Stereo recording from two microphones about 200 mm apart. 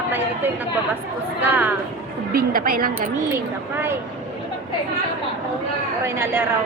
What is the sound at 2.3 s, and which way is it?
Speech, 45° right (ahead or behind).